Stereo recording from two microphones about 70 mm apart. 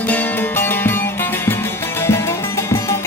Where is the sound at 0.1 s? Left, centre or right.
Left.